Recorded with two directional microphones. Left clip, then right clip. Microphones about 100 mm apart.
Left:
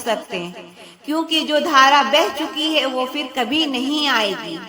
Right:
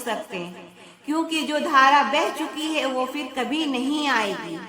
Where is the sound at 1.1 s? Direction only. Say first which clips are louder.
Left 5 dB; 20° left (ahead or behind).